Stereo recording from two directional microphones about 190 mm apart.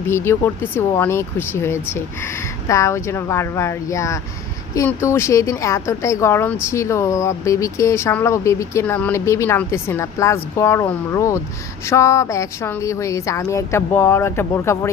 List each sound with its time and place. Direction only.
0.1 s a woman's voice: 15° left (ahead or behind)